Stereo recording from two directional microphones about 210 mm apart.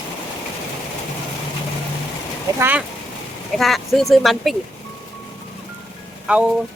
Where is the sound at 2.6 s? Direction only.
10° right (ahead or behind).